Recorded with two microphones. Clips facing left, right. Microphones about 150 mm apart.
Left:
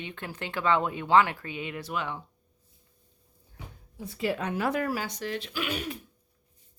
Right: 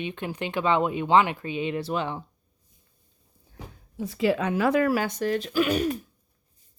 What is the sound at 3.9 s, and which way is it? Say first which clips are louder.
Speech: right 6 dB; 90° right.